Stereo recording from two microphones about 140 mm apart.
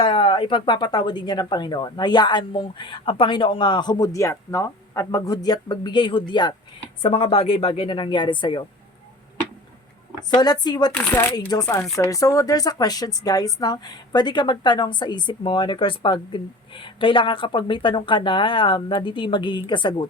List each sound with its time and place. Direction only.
0.0 s a woman's voice: 40° left (ahead or behind)
10.2 s speech: 30° left (ahead or behind)
10.9 s speech: 10° left (ahead or behind)
11.3 s a woman's voice: 30° left (ahead or behind)